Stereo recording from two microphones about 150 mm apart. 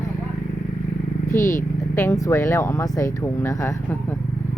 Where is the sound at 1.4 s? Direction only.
60° left (ahead or behind).